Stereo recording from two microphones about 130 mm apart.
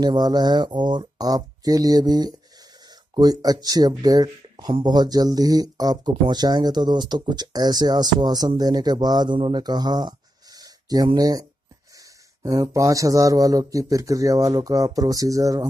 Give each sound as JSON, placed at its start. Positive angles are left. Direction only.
{"t": 0.0, "sound": "speech", "side_deg": -30}
{"t": 12.4, "sound": "speech", "side_deg": -25}